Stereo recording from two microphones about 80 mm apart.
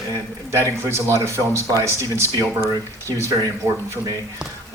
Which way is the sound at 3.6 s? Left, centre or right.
Right.